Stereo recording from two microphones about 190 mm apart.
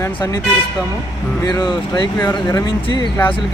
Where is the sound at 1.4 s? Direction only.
20° left (ahead or behind).